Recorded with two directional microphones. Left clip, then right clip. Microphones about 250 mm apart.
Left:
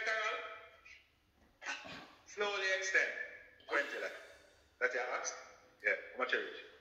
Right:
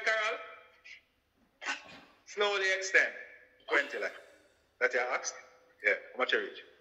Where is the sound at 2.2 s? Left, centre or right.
Right.